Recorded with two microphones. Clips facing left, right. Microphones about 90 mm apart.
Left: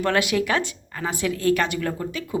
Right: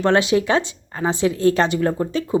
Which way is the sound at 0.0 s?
25° right (ahead or behind).